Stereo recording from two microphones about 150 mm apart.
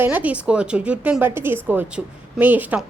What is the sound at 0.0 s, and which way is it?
A woman's voice, 10° right (ahead or behind).